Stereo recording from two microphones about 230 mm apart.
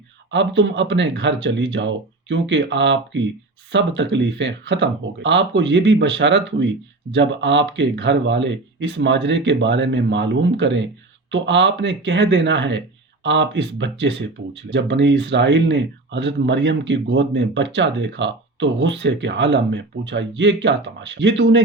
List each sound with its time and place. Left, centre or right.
0.3 s speech: right